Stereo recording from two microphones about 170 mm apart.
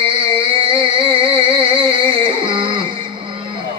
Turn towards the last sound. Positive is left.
turn(degrees=-30)  # may be behind; listen again after turning